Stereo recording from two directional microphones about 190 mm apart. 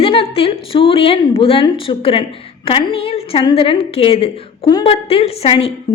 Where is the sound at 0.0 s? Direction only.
30° left (ahead or behind).